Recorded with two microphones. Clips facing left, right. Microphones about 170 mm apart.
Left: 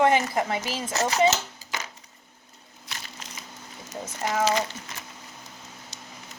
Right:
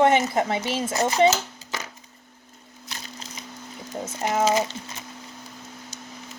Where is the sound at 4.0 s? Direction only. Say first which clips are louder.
Right 3 dB; 25° right (ahead or behind).